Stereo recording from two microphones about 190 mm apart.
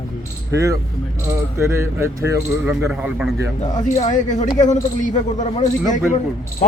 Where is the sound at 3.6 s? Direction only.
40° left (ahead or behind).